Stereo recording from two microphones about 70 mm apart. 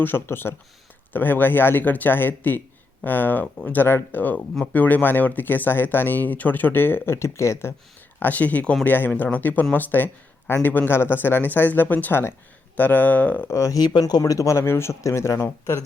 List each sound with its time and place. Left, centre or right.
0.0 s speech: left
8.2 s speech: left
13.5 s speech: left
13.7 s speech: left